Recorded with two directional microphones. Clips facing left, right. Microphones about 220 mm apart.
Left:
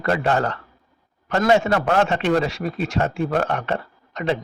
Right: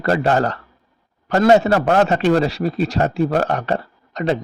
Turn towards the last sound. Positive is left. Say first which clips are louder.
# right 4 dB
turn(degrees=-35)  # may be behind; listen again after turning